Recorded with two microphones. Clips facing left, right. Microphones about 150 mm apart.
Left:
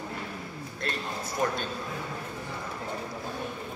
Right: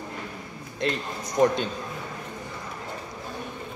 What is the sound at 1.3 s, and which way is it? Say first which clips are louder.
Speech: right 8 dB; 20° right (ahead or behind).